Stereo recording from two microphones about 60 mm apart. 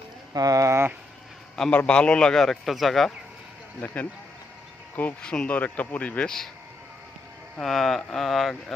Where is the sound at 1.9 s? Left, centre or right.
Centre.